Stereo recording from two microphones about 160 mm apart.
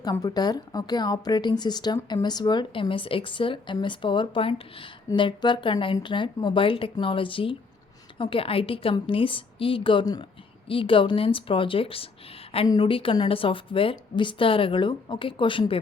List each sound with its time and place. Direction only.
0.0 s a woman's voice: 25° left (ahead or behind)